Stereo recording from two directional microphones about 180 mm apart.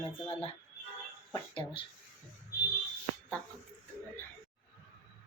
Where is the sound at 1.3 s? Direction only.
30° left (ahead or behind).